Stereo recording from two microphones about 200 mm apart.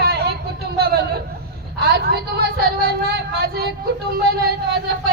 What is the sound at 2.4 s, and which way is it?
Speech, 50° right (ahead or behind).